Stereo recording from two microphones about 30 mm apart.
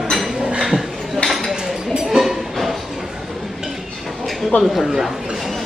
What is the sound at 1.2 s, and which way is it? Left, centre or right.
Dishes, left.